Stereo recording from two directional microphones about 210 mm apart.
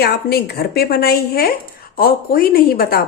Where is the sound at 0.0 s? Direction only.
50° left (ahead or behind).